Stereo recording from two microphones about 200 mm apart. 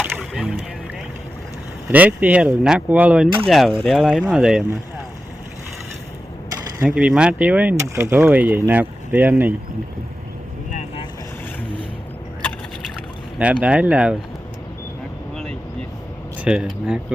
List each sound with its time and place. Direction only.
0.0 s music: 5° right (ahead or behind)
1.9 s speech: 10° right (ahead or behind)
6.7 s speech: 5° right (ahead or behind)
10.7 s vehicle: 35° left (ahead or behind)
13.4 s speech: 5° right (ahead or behind)
16.4 s speech: 5° right (ahead or behind)